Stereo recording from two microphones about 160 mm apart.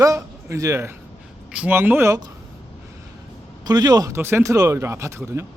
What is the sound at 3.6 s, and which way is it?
Speech, 25° right (ahead or behind).